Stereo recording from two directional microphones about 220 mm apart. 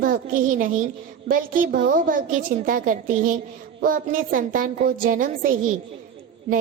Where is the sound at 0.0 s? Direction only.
40° right (ahead or behind).